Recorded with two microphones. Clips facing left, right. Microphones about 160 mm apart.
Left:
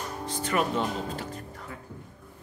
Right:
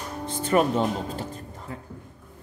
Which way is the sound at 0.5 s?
35° right (ahead or behind).